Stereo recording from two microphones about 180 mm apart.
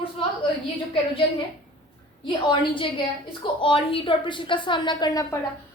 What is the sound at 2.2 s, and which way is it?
A woman's voice, 25° left (ahead or behind).